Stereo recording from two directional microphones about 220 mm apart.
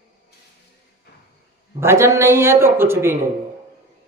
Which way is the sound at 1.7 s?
10° right (ahead or behind).